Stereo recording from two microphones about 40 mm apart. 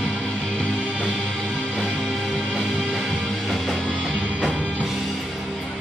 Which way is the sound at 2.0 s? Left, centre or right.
Centre.